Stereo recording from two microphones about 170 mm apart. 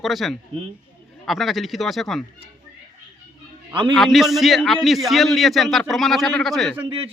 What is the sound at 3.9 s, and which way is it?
A man's voice, centre (ahead or behind).